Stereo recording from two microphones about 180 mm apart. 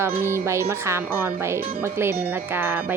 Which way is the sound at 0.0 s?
15° right (ahead or behind).